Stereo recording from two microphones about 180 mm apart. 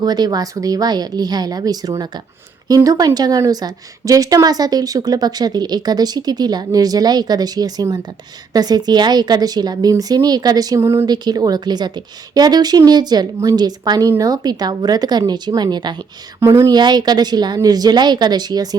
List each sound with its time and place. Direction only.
0.0 s a woman's voice: 20° right (ahead or behind)